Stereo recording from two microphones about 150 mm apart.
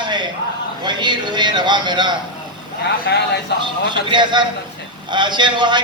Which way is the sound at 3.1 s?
90° left.